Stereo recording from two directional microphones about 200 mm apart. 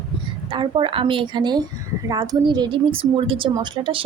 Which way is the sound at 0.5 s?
25° right (ahead or behind).